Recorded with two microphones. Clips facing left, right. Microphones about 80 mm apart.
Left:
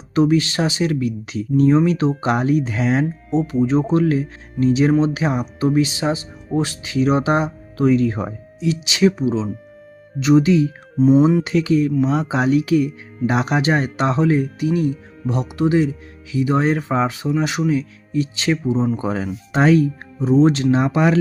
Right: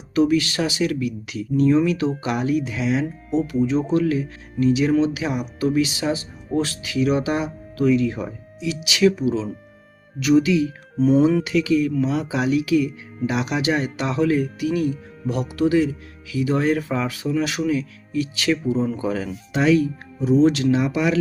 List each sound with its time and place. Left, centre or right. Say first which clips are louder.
0.1 s speech: left 2 dB; left
3.3 s speech: left 3 dB; left
10.9 s speech: left 3 dB; left
11.4 s speech: left 2 dB; left
19.5 s speech: left 3 dB; left